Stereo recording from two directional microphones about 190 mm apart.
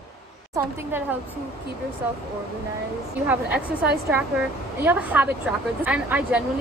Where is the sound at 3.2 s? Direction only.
10° right (ahead or behind).